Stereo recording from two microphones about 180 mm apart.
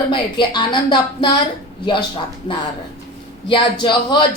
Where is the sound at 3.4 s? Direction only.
25° left (ahead or behind).